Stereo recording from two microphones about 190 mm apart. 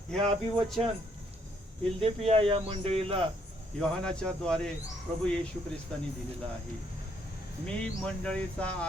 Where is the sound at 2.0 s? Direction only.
30° right (ahead or behind).